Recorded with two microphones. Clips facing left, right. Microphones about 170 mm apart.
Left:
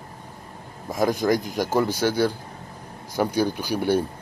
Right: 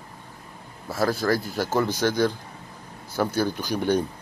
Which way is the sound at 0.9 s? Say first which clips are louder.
Left 2 dB; 15° left (ahead or behind).